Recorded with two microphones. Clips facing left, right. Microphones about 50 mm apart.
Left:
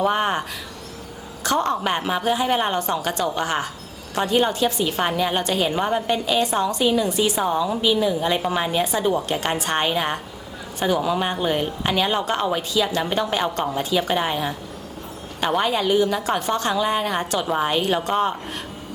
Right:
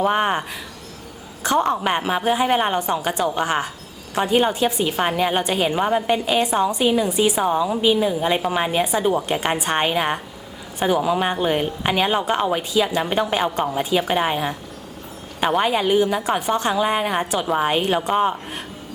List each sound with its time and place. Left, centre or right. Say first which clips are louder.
0.0 s a sound: right 1 dB; centre
1.5 s speech: right 2 dB; centre
17.4 s a woman's voice: right 2 dB; centre
17.7 s a woman's voice: right 2 dB; centre